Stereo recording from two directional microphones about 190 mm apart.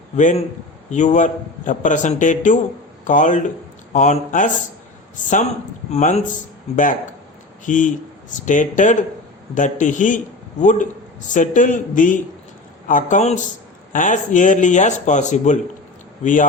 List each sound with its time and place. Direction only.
0.2 s a man's voice: 40° left (ahead or behind)
7.6 s a man's voice: 40° left (ahead or behind)